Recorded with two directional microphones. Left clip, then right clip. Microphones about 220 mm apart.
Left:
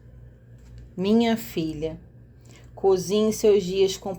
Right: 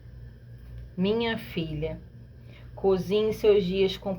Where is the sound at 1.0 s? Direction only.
50° left (ahead or behind).